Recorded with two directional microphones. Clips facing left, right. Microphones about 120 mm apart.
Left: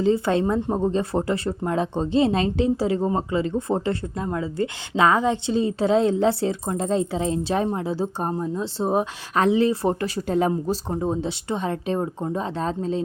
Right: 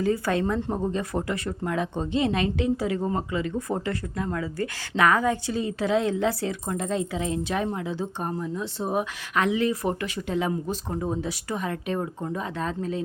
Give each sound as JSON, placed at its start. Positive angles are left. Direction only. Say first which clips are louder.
{"t": 0.0, "sound": "speech", "louder": "left 4 dB", "side_deg": 25}